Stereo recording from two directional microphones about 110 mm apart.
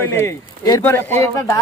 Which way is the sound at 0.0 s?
25° left (ahead or behind).